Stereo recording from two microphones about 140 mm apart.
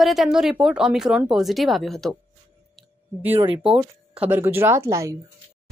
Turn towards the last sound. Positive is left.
turn(degrees=-20)  # may be behind; listen again after turning